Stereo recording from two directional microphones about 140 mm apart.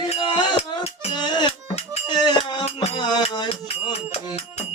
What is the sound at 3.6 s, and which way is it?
Music, 45° left (ahead or behind).